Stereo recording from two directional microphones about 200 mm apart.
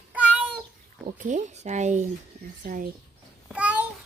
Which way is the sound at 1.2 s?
35° right (ahead or behind).